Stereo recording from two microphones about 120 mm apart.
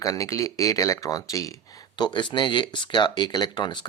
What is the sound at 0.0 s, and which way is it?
Speech, 25° left (ahead or behind).